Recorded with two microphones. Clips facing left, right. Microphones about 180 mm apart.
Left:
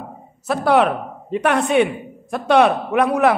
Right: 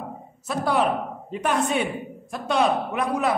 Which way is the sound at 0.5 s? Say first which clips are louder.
Left 6 dB; 70° left (ahead or behind).